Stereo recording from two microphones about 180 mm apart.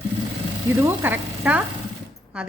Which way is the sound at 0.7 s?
15° right (ahead or behind).